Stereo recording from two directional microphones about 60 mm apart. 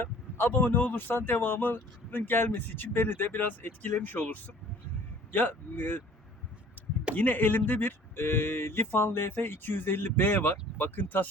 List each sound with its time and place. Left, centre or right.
0.0 s speech: left
7.2 s speech: left